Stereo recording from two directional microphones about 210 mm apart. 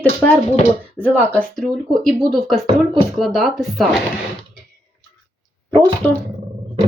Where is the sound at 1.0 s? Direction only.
5° right (ahead or behind).